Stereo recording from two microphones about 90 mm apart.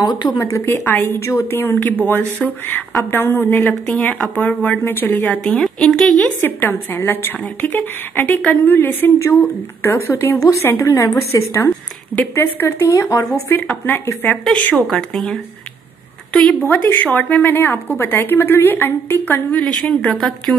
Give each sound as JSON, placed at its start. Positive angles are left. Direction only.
{"t": 0.0, "sound": "a woman's voice", "side_deg": 55}
{"t": 0.4, "sound": "a woman's voice", "side_deg": 30}
{"t": 3.1, "sound": "a woman's voice", "side_deg": 25}
{"t": 5.5, "sound": "speech", "side_deg": 5}
{"t": 6.4, "sound": "a woman's voice", "side_deg": 20}
{"t": 10.4, "sound": "a woman's voice", "side_deg": 35}
{"t": 14.9, "sound": "speech", "side_deg": 5}
{"t": 16.6, "sound": "a woman's voice", "side_deg": 20}
{"t": 19.6, "sound": "speech", "side_deg": 5}